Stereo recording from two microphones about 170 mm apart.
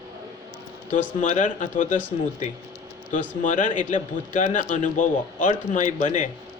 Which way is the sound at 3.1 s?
50° left (ahead or behind).